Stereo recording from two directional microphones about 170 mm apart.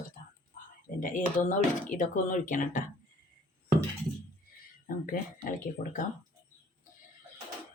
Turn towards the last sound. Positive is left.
turn(degrees=50)  # may be behind; listen again after turning